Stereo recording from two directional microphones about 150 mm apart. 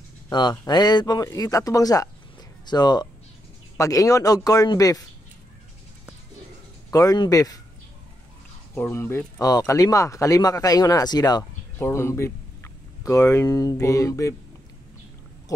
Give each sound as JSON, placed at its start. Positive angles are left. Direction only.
{"t": 0.3, "sound": "speech", "side_deg": 30}
{"t": 6.9, "sound": "speech", "side_deg": 25}
{"t": 8.7, "sound": "speech", "side_deg": 15}